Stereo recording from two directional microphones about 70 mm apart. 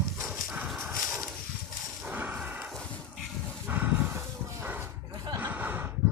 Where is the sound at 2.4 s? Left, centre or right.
Right.